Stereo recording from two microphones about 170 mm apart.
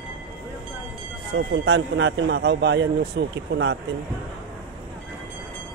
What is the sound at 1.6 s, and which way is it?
A man's voice, 80° right.